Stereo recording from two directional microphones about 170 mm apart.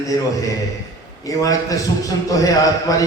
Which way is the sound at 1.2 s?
20° left (ahead or behind).